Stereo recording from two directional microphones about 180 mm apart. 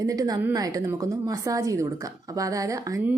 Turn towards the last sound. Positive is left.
turn(degrees=-20)  # may be behind; listen again after turning